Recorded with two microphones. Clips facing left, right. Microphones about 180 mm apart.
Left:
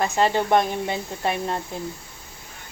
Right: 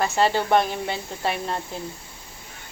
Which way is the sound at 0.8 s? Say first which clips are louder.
Left 1 dB; 20° left (ahead or behind).